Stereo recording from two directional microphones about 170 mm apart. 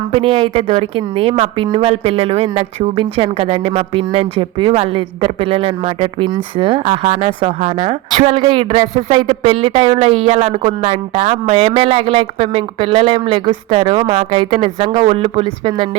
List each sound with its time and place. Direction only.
0.1 s speech: 30° right (ahead or behind)